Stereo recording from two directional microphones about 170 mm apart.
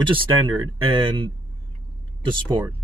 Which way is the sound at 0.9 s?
30° right (ahead or behind).